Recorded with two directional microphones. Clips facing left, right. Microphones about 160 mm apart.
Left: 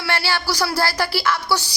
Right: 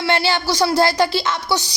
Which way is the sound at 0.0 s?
20° right (ahead or behind).